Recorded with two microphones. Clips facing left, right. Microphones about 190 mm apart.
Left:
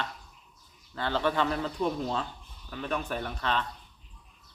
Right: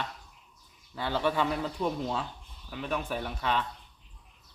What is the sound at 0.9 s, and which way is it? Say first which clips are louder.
Speech: left 1 dB; 10° right (ahead or behind).